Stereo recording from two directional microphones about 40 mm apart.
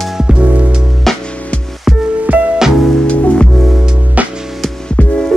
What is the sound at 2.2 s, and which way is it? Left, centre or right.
Music, right.